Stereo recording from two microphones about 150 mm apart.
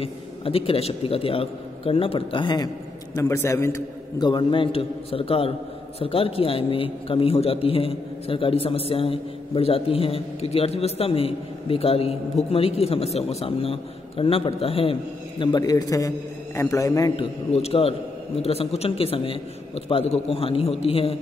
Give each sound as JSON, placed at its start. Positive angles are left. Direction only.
{"t": 0.0, "sound": "a man's voice", "side_deg": 40}
{"t": 3.2, "sound": "a man's voice", "side_deg": 20}
{"t": 4.2, "sound": "a man's voice", "side_deg": 30}
{"t": 17.2, "sound": "a man's voice", "side_deg": 45}